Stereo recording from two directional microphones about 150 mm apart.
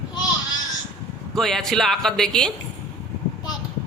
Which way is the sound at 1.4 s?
Centre (ahead or behind).